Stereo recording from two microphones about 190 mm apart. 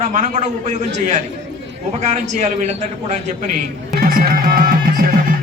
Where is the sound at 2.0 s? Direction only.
35° right (ahead or behind).